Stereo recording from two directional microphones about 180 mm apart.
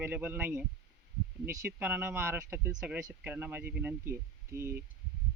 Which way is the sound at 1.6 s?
10° right (ahead or behind).